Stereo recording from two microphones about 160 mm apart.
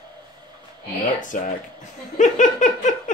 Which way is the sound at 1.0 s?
55° left (ahead or behind).